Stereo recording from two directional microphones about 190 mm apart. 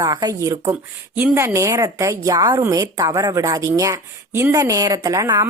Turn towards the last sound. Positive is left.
turn(degrees=-15)  # may be behind; listen again after turning